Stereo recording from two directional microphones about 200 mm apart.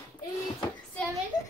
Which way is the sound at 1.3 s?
20° left (ahead or behind).